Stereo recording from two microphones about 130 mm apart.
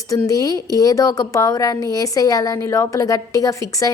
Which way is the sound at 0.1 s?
25° left (ahead or behind).